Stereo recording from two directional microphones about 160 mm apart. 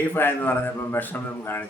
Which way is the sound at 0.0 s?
10° left (ahead or behind).